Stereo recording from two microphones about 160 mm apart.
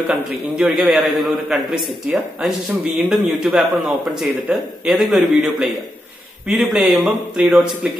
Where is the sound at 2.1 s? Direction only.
10° right (ahead or behind).